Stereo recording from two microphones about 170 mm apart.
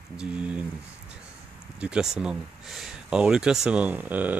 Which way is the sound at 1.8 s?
5° right (ahead or behind).